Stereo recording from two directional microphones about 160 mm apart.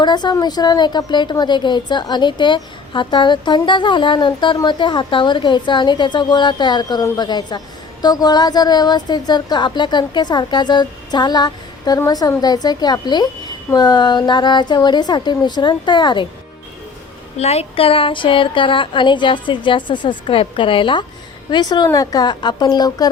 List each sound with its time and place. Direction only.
0.0 s a woman's voice: 25° left (ahead or behind)
17.3 s a woman's voice: 40° left (ahead or behind); by 23.0 s 25° left (ahead or behind)